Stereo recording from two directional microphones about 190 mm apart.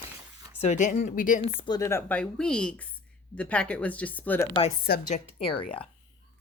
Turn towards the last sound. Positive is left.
turn(degrees=30)  # may be behind; listen again after turning